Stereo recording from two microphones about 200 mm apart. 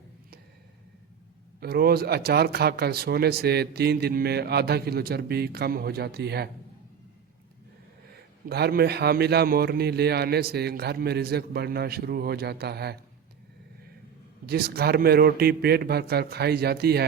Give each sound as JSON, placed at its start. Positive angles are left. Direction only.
{"t": 1.6, "sound": "speech", "side_deg": -50}
{"t": 8.4, "sound": "speech", "side_deg": -55}
{"t": 14.4, "sound": "speech", "side_deg": -50}